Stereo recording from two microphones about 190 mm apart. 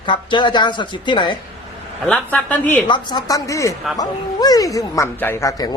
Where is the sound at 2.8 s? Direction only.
25° left (ahead or behind).